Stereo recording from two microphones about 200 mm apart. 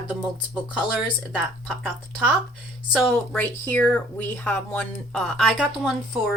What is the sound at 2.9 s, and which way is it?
Speech, centre (ahead or behind).